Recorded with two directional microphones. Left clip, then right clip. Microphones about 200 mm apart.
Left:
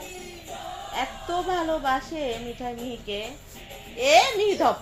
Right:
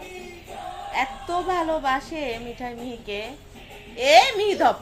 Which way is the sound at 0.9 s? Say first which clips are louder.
Right 3 dB; 25° right (ahead or behind).